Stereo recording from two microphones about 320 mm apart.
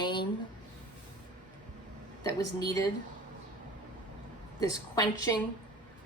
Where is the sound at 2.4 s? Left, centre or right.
Centre.